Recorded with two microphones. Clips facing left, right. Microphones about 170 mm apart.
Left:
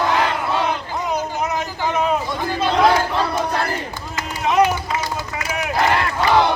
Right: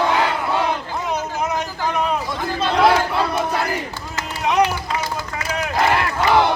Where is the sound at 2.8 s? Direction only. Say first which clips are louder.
Right 1 dB; 10° right (ahead or behind).